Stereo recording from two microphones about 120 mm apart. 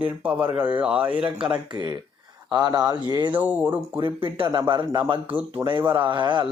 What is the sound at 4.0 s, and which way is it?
Speech, 45° right (ahead or behind).